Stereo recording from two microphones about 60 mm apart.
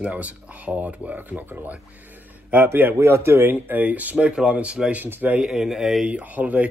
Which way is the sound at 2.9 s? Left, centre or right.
Right.